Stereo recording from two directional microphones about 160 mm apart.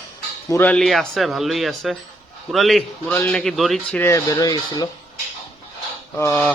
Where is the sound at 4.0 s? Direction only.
20° left (ahead or behind).